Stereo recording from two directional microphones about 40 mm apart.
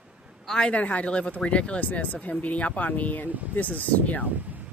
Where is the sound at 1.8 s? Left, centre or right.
Left.